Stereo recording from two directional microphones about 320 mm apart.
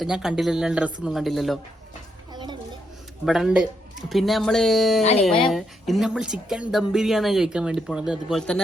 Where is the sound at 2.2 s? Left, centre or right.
Centre.